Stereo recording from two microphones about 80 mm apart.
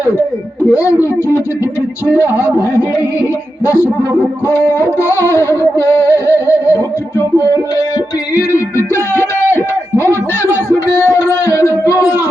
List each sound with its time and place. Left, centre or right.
0.8 s speech: centre
4.7 s music: left
9.1 s a sound: left
11.1 s music: left